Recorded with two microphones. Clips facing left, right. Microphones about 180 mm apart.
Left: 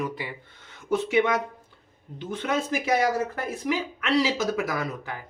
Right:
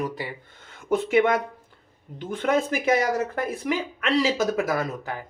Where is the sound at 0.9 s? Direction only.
50° right (ahead or behind).